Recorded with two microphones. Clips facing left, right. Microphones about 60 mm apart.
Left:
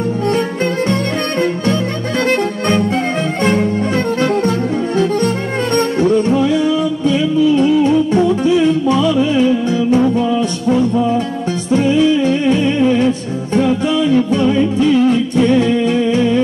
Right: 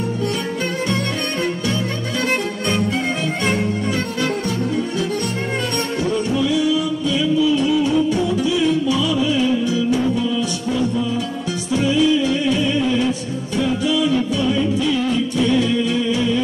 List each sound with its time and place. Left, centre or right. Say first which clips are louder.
5.9 s music: left 6 dB; left